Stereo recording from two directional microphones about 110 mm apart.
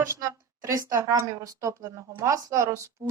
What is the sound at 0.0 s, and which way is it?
A woman's voice, 30° right (ahead or behind).